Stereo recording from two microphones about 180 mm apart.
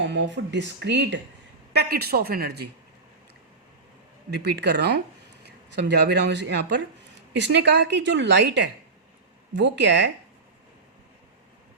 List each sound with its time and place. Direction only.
0.0 s a woman's voice: 80° right
1.7 s speech: 65° right (ahead or behind)
4.3 s a woman's voice: 70° right (ahead or behind)